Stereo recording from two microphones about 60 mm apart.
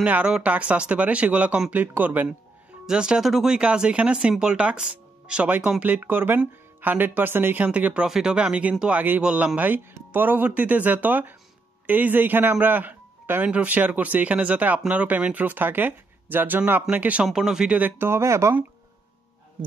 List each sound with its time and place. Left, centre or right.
0.0 s speech: right
2.9 s speech: centre
5.8 s speech: right
7.6 s speech: right
8.1 s speech: centre
9.6 s a man's voice: right
17.3 s speech: centre
17.7 s speech: right
18.2 s speech: right